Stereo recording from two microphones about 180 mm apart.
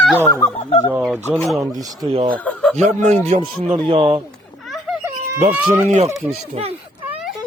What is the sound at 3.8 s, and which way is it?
Speech, 30° right (ahead or behind).